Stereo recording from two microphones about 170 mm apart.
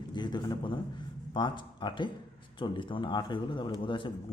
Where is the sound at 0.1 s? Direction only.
25° left (ahead or behind).